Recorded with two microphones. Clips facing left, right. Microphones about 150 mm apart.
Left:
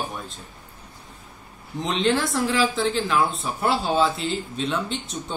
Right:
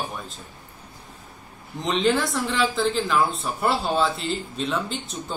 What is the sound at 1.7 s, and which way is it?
A man's voice, centre (ahead or behind).